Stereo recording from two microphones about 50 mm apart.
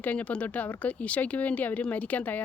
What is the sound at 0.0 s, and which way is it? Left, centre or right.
Speech, left.